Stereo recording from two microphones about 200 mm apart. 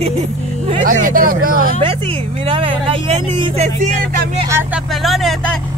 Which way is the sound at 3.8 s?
40° right (ahead or behind).